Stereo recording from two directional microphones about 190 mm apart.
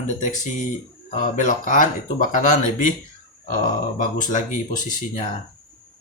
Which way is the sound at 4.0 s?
45° left (ahead or behind).